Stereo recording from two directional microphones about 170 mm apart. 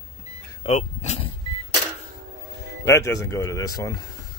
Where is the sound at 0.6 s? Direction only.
40° left (ahead or behind).